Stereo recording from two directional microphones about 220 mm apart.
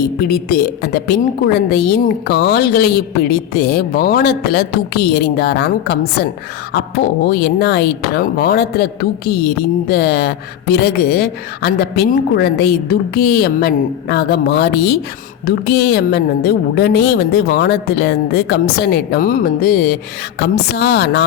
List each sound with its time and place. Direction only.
0.0 s speech: 45° left (ahead or behind)